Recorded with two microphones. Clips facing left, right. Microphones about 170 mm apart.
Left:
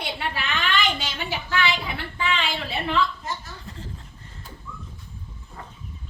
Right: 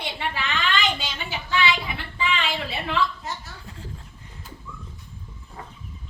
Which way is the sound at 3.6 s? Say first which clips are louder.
Left 2 dB; 10° right (ahead or behind).